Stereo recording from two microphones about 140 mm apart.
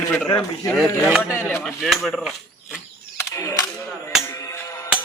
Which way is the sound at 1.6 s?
Centre (ahead or behind).